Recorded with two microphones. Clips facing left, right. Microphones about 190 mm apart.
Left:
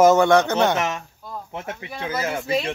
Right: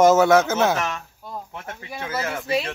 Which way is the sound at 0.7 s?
20° left (ahead or behind).